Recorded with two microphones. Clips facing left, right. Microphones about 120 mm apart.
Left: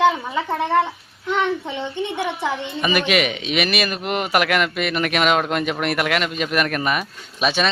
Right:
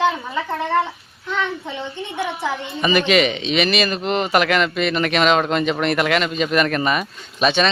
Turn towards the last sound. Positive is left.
turn(degrees=5)  # may be behind; listen again after turning